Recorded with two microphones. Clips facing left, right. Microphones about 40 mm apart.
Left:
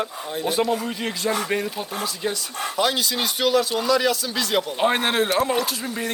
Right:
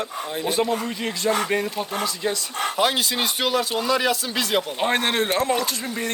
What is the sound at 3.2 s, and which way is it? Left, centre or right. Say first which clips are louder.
Speech: left 5 dB; centre.